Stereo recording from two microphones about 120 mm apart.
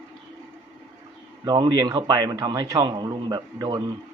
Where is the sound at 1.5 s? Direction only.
35° right (ahead or behind).